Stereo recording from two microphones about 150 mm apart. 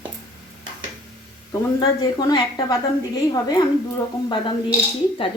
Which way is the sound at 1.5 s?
25° left (ahead or behind).